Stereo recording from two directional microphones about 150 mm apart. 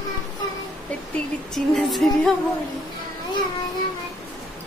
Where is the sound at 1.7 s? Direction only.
Centre (ahead or behind).